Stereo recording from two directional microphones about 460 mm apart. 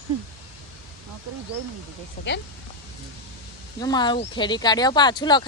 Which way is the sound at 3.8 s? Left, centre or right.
Centre.